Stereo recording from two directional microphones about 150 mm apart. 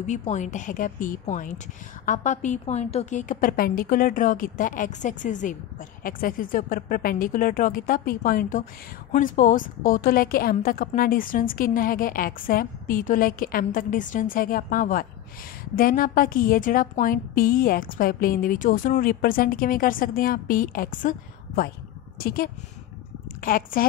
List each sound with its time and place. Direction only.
0.0 s a woman's voice: 50° left (ahead or behind); by 21.6 s 65° left (ahead or behind)
22.2 s speech: 90° left
23.4 s a woman's voice: 70° left (ahead or behind)